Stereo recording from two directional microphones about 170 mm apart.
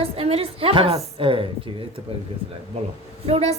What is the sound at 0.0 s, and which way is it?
A woman's voice, 35° right (ahead or behind).